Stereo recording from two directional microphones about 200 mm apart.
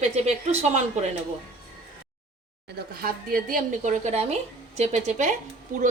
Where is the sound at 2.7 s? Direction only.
45° right (ahead or behind).